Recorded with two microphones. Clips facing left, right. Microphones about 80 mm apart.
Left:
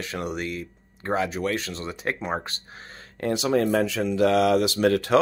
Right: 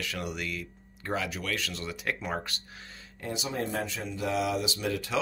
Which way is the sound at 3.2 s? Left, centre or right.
Left.